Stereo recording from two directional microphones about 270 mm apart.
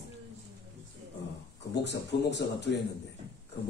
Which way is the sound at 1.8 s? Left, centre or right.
Left.